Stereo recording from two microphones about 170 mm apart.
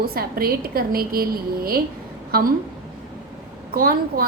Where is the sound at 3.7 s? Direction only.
60° right (ahead or behind).